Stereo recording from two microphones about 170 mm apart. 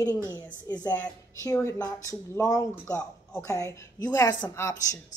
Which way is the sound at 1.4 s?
15° left (ahead or behind).